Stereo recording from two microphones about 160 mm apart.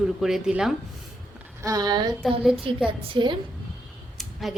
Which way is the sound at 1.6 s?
25° right (ahead or behind).